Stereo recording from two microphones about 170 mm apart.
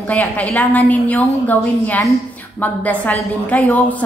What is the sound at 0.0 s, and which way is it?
A woman's voice, 10° left (ahead or behind).